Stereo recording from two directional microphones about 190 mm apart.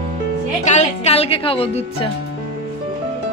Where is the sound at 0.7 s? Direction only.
35° left (ahead or behind).